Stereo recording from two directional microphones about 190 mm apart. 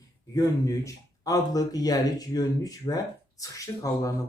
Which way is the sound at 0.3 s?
15° left (ahead or behind).